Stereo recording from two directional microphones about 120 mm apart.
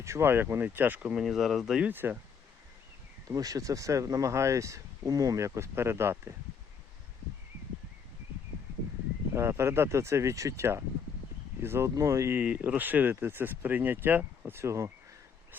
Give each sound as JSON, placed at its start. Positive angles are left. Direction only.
{"t": 0.0, "sound": "speech", "side_deg": -20}
{"t": 3.2, "sound": "speech", "side_deg": -30}
{"t": 9.3, "sound": "speech", "side_deg": -20}
{"t": 12.4, "sound": "speech", "side_deg": -10}